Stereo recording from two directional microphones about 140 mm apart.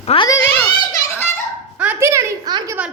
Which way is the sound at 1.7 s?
15° right (ahead or behind).